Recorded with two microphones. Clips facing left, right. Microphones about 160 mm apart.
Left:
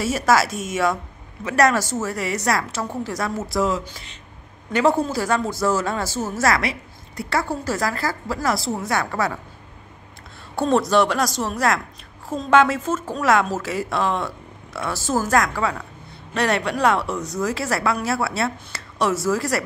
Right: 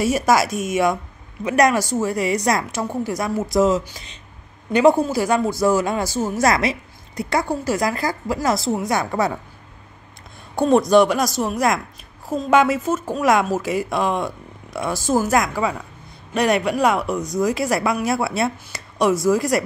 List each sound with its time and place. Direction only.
0.0 s speech: 15° right (ahead or behind)
10.5 s speech: 15° right (ahead or behind)